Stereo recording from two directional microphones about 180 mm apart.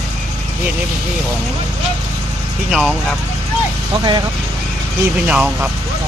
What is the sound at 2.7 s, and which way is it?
Speech, 5° right (ahead or behind).